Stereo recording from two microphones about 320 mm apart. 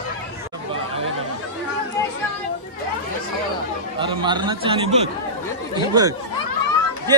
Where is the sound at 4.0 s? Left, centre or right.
Centre.